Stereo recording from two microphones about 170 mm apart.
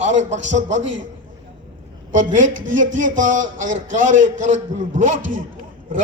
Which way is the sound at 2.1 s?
50° right (ahead or behind).